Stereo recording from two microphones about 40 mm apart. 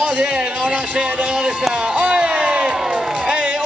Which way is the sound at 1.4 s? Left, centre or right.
Centre.